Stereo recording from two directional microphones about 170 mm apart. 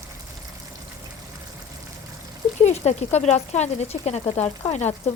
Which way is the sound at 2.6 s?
40° left (ahead or behind).